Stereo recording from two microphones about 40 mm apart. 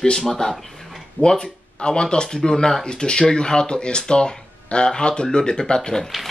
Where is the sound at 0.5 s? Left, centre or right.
Centre.